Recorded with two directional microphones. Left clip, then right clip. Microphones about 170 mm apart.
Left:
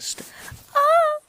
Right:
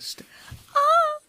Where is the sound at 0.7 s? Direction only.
15° left (ahead or behind).